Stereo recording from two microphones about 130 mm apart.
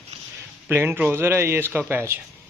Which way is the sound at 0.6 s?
15° right (ahead or behind).